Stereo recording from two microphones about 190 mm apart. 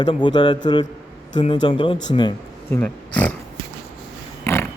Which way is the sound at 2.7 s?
5° left (ahead or behind).